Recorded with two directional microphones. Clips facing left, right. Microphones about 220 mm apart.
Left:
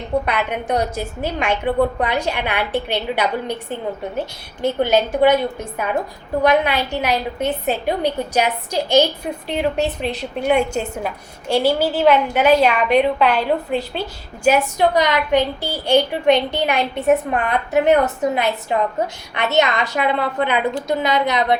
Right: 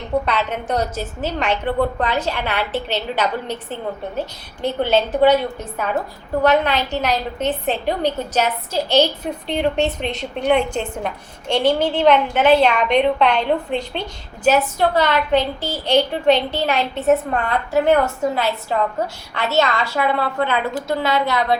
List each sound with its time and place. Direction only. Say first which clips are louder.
0.3 s a woman's voice: left 1 dB; 10° left (ahead or behind)
4.8 s a woman's voice: even; 10° left (ahead or behind)